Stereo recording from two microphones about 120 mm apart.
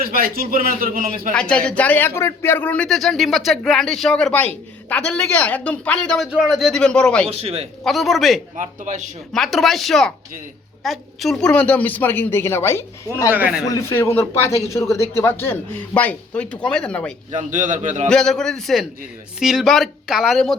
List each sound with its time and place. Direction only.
1.3 s a man's voice: 10° left (ahead or behind)
6.3 s speech: 5° right (ahead or behind)
7.3 s speech: 55° right (ahead or behind)
7.9 s speech: centre (ahead or behind)
8.5 s a man's voice: 90° right
9.3 s a man's voice: centre (ahead or behind); by 12.8 s 20° left (ahead or behind)
13.3 s a man's voice: 15° right (ahead or behind)
13.7 s a man's voice: 25° left (ahead or behind)
17.3 s a man's voice: 90° right
18.1 s speech: 5° left (ahead or behind)